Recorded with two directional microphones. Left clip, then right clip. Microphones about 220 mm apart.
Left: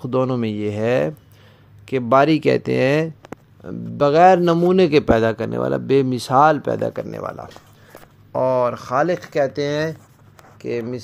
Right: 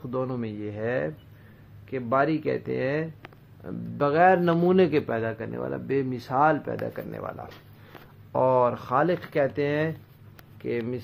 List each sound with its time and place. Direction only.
0.0 s speech: 45° left (ahead or behind)
4.0 s a man's voice: 35° left (ahead or behind)
5.1 s speech: 50° left (ahead or behind); by 7.4 s 30° left (ahead or behind)
8.3 s speech: 10° left (ahead or behind)